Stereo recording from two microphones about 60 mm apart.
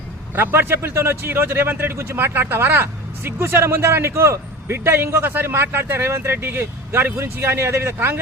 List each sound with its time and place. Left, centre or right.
0.3 s speech: right